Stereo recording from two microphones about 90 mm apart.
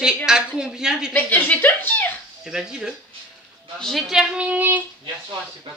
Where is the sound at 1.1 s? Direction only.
20° left (ahead or behind).